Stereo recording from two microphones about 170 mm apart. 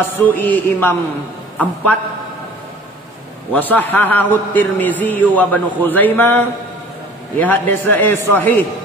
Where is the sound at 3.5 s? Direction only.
10° left (ahead or behind).